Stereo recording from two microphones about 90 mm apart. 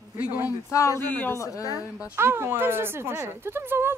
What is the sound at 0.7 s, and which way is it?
Speech, 35° left (ahead or behind).